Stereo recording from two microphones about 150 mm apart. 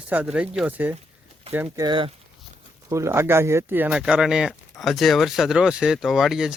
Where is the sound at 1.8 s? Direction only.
35° right (ahead or behind).